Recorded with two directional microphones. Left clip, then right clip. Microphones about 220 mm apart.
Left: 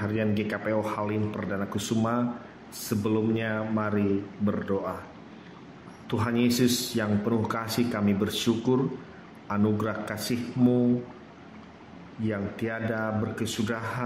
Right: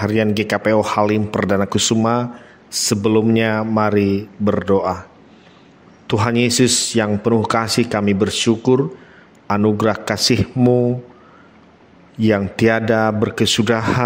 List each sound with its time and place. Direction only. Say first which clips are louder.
0.0 s speech: right 11 dB; 45° right (ahead or behind)
6.0 s speech: right 10 dB; 40° right (ahead or behind)
12.2 s speech: right 15 dB; 45° right (ahead or behind)